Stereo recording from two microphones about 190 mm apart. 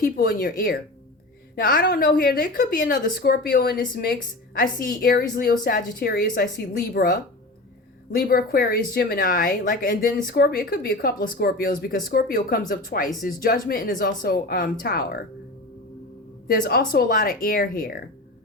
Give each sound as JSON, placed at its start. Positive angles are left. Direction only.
{"t": 0.0, "sound": "speech", "side_deg": 50}
{"t": 16.5, "sound": "speech", "side_deg": 55}